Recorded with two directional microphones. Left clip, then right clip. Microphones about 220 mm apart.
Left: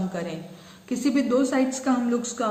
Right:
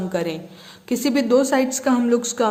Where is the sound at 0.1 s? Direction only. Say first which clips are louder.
Right 8 dB; 50° right (ahead or behind).